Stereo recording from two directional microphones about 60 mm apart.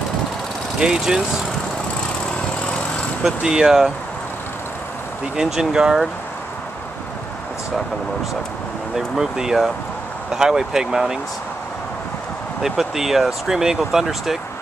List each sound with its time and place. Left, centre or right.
0.7 s speech: centre
2.6 s vehicle: centre
3.3 s speech: centre
5.3 s speech: centre
8.9 s speech: centre
12.6 s speech: centre